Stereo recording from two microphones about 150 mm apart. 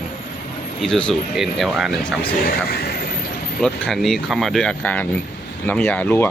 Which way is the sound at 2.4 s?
90° left.